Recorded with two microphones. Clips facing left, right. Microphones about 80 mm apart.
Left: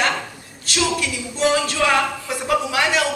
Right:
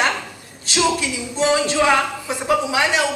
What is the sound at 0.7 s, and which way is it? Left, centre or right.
Speech, right.